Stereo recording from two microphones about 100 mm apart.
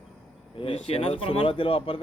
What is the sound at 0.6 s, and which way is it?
Speech, 75° left (ahead or behind).